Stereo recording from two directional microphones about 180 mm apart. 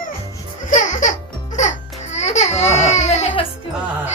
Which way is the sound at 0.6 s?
45° left (ahead or behind).